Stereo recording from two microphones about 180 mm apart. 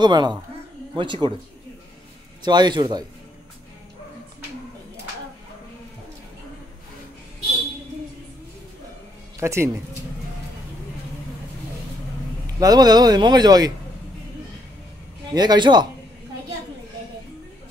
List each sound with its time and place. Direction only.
0.0 s speech: 25° right (ahead or behind)
2.4 s speech: 25° right (ahead or behind)
9.4 s speech: 15° right (ahead or behind)
12.5 s speech: 20° right (ahead or behind)
15.3 s speech: 25° right (ahead or behind)